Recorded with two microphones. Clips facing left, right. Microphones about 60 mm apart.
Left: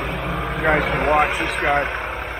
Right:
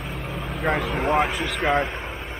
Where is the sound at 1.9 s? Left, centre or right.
Left.